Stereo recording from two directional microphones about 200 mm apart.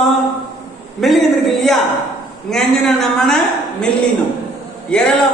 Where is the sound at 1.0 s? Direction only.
Centre (ahead or behind).